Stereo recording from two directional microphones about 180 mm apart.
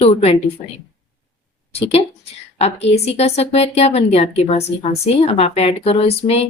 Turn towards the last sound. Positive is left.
turn(degrees=35)  # may be behind; listen again after turning